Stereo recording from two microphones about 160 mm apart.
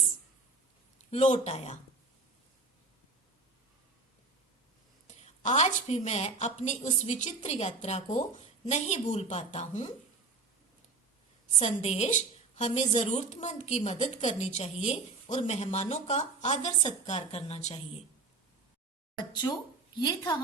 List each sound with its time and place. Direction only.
1.1 s speech: 40° left (ahead or behind)
5.0 s a woman's voice: 45° left (ahead or behind)
11.6 s a woman's voice: 45° left (ahead or behind)
19.2 s a woman's voice: 25° left (ahead or behind)